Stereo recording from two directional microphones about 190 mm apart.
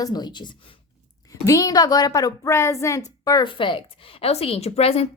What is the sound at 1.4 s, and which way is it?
A woman's voice, 15° left (ahead or behind).